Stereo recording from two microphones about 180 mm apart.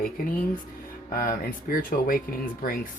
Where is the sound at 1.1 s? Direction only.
50° left (ahead or behind).